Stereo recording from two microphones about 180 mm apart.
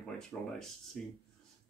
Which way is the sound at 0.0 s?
5° left (ahead or behind).